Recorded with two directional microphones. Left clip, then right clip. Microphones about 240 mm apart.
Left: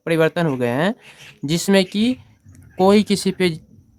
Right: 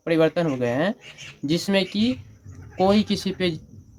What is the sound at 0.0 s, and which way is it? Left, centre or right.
Speech, left.